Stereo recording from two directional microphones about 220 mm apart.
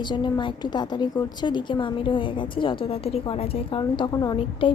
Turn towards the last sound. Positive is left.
turn(degrees=20)  # may be behind; listen again after turning